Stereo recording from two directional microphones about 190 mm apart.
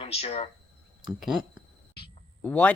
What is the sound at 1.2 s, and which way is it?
Speech, centre (ahead or behind).